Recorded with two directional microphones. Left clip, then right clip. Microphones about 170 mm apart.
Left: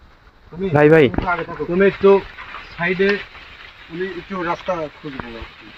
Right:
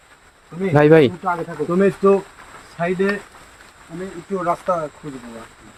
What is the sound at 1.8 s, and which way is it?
Speech, 45° right (ahead or behind).